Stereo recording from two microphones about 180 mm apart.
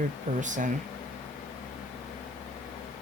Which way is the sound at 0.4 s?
45° right (ahead or behind).